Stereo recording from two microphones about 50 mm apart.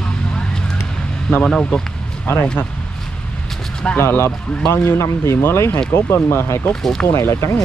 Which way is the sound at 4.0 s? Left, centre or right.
Left.